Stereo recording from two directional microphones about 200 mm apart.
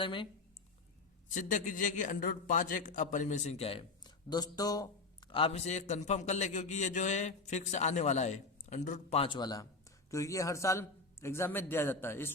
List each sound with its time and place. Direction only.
0.0 s speech: 25° left (ahead or behind)
1.3 s a man's voice: 40° left (ahead or behind); by 4.9 s 20° left (ahead or behind)
5.3 s a man's voice: 30° left (ahead or behind); by 12.3 s 10° left (ahead or behind)